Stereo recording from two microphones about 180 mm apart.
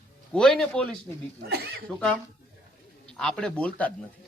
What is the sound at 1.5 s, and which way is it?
Speech, 60° right (ahead or behind).